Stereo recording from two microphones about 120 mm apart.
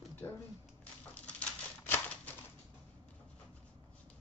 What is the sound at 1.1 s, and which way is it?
Typewriter, 10° left (ahead or behind).